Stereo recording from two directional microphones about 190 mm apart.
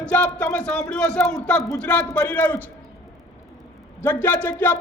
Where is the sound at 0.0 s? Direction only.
5° left (ahead or behind).